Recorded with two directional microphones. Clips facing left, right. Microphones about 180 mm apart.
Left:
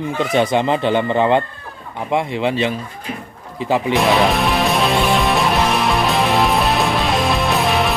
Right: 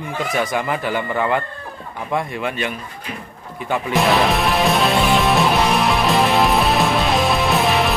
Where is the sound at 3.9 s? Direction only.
Centre (ahead or behind).